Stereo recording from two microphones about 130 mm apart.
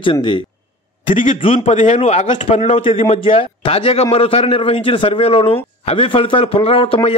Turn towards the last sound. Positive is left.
turn(degrees=45)  # may be behind; listen again after turning